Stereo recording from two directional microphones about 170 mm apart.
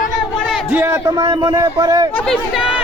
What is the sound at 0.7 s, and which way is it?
Speech, 15° right (ahead or behind).